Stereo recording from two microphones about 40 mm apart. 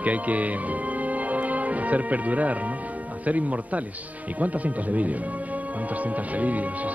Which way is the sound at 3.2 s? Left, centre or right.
Right.